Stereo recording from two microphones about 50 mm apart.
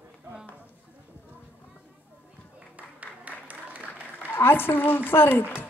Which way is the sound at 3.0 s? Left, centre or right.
Right.